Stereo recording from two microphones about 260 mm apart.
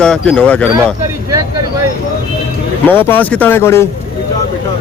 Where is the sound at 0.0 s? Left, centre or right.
Centre.